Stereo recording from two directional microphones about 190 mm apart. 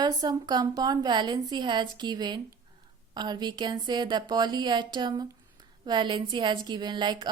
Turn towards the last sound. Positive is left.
turn(degrees=-25)  # may be behind; listen again after turning